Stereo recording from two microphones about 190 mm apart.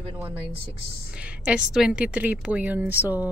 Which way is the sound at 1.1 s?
5° right (ahead or behind).